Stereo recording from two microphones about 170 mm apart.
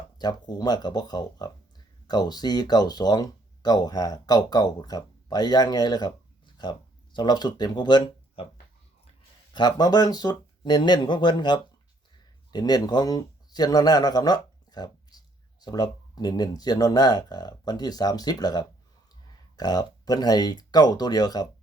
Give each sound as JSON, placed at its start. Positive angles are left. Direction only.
{"t": 0.2, "sound": "speech", "side_deg": 25}
{"t": 9.5, "sound": "speech", "side_deg": 25}